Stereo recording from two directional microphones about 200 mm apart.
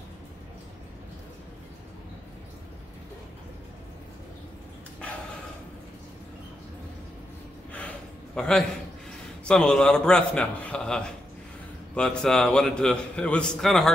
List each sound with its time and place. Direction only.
8.4 s a man's voice: 5° left (ahead or behind)